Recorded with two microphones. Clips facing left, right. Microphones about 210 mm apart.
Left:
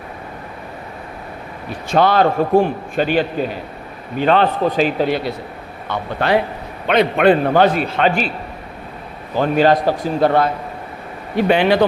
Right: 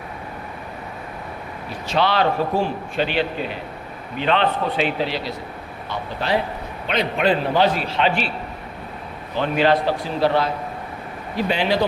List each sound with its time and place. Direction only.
1.9 s a man's voice: 50° left (ahead or behind)
9.3 s a man's voice: 45° left (ahead or behind); by 11.9 s 60° left (ahead or behind)